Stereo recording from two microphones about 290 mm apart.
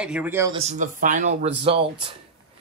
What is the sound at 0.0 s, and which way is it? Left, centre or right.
Speech, centre.